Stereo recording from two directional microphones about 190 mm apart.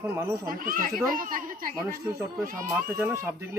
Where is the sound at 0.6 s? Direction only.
45° right (ahead or behind).